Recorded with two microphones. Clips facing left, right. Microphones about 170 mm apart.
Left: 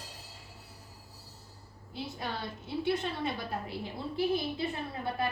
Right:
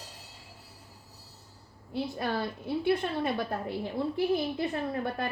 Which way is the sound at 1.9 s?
60° right (ahead or behind).